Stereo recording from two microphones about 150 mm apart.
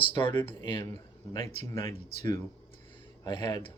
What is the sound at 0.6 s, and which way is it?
Speech, 25° left (ahead or behind).